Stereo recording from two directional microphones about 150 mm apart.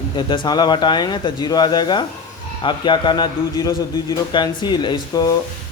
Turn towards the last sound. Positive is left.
turn(degrees=25)  # may be behind; listen again after turning